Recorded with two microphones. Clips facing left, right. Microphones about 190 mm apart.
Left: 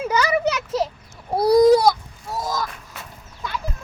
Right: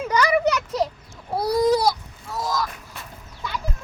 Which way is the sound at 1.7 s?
50° left (ahead or behind).